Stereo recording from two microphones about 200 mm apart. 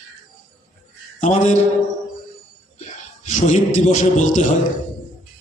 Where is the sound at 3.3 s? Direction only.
35° left (ahead or behind).